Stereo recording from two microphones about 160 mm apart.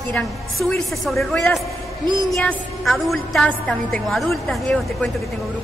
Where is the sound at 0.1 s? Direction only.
Centre (ahead or behind).